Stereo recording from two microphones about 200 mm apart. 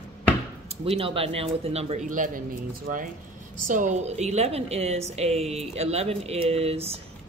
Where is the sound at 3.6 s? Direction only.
40° right (ahead or behind).